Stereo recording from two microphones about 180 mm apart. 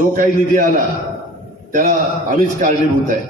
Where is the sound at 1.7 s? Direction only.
45° right (ahead or behind).